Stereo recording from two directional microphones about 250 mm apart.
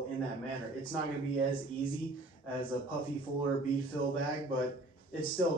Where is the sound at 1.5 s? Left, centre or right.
Left.